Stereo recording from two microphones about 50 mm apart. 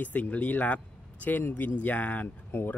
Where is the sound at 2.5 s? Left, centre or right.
Left.